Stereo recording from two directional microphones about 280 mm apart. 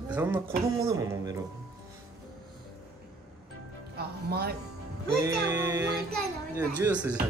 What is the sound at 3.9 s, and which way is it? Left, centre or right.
Music, right.